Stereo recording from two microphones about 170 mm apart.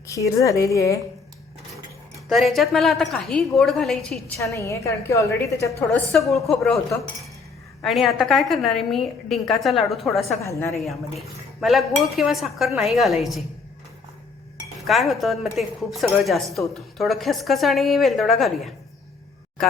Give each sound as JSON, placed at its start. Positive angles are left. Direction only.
{"t": 0.1, "sound": "a woman's voice", "side_deg": 20}
{"t": 2.3, "sound": "a woman's voice", "side_deg": 0}
{"t": 4.5, "sound": "a woman's voice", "side_deg": 20}
{"t": 6.1, "sound": "a woman's voice", "side_deg": 0}
{"t": 7.8, "sound": "a woman's voice", "side_deg": 0}
{"t": 10.4, "sound": "a woman's voice", "side_deg": 15}
{"t": 10.8, "sound": "a woman's voice", "side_deg": 0}
{"t": 14.8, "sound": "a woman's voice", "side_deg": 0}